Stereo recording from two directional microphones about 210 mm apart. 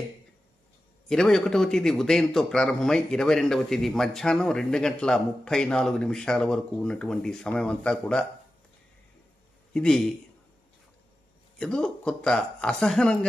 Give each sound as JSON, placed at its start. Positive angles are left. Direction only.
{"t": 1.0, "sound": "a man's voice", "side_deg": 0}
{"t": 9.8, "sound": "a man's voice", "side_deg": 5}
{"t": 11.5, "sound": "a man's voice", "side_deg": 5}